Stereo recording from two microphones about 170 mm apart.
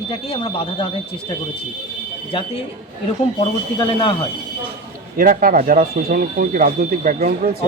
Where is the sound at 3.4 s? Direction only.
30° left (ahead or behind).